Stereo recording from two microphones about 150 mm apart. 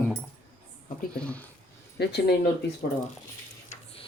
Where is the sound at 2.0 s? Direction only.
90° left.